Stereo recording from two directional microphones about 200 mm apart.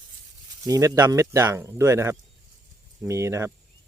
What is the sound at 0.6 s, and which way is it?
Speech, 15° right (ahead or behind).